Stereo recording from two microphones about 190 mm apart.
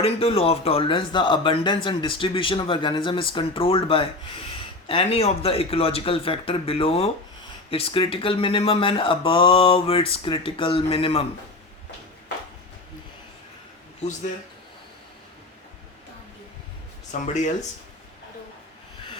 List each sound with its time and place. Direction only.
0.0 s speech: 30° left (ahead or behind)
17.1 s speech: 40° left (ahead or behind)